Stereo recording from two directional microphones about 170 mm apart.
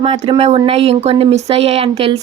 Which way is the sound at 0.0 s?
35° right (ahead or behind).